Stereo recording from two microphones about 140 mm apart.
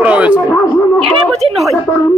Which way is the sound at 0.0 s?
10° right (ahead or behind).